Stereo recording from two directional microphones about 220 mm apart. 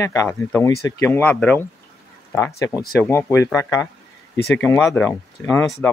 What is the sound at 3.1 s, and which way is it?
Speech, 15° left (ahead or behind).